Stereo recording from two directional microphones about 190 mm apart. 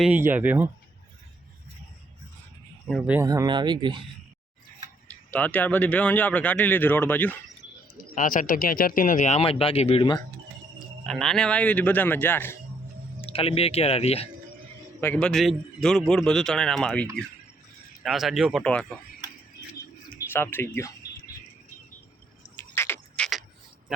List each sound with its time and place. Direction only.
0.0 s speech: 10° right (ahead or behind)
3.0 s speech: 5° right (ahead or behind)
3.2 s speech: 20° right (ahead or behind)
5.0 s speech: 5° left (ahead or behind)
8.1 s speech: 45° left (ahead or behind); by 10.2 s 25° left (ahead or behind)
11.0 s speech: centre (ahead or behind)
13.2 s speech: 30° left (ahead or behind)
15.0 s a man's voice: 5° left (ahead or behind)
20.3 s speech: 10° left (ahead or behind)
22.5 s a sound: 15° left (ahead or behind)